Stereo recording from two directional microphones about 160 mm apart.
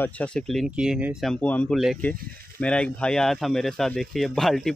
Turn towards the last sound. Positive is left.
turn(degrees=0)  # may be behind; listen again after turning